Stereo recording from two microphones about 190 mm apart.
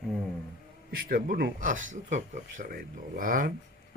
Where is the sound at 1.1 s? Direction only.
50° right (ahead or behind).